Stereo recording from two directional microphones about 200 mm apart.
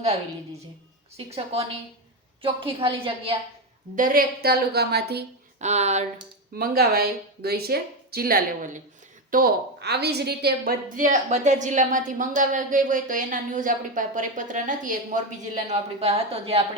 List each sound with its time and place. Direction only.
1.1 s a woman's voice: 30° right (ahead or behind)
3.9 s speech: 45° right (ahead or behind)
5.5 s a woman's voice: 35° right (ahead or behind)
6.5 s a woman's voice: 50° right (ahead or behind); by 16.6 s 30° right (ahead or behind)